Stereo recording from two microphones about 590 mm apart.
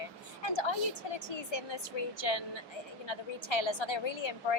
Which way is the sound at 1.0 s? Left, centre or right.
Left.